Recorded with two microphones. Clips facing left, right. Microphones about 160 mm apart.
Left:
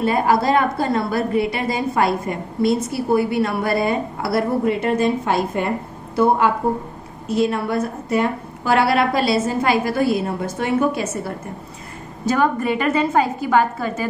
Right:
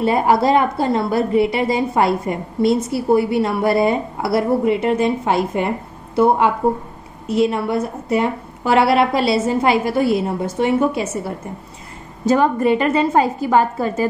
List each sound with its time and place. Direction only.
0.0 s a woman's voice: 25° right (ahead or behind)